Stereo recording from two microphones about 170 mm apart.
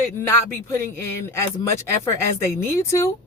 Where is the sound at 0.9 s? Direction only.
15° left (ahead or behind).